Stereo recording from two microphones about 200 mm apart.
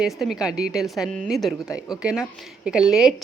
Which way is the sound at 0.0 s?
Centre (ahead or behind).